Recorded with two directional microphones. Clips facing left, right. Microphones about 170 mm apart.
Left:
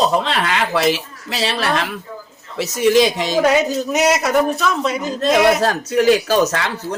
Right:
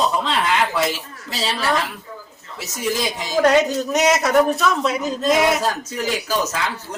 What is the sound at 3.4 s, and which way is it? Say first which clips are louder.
A man's voice: right 2 dB; 5° left (ahead or behind).